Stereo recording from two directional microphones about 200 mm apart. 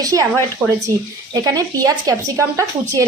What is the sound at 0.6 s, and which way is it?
Speech, 10° right (ahead or behind).